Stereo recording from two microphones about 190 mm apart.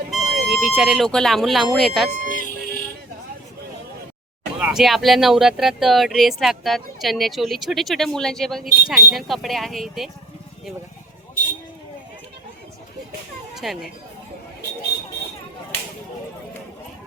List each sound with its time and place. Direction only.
0.1 s a sound: 5° right (ahead or behind)
0.8 s speech: centre (ahead or behind)
2.0 s speech: 40° right (ahead or behind)
4.6 s speech: centre (ahead or behind)
13.6 s speech: centre (ahead or behind)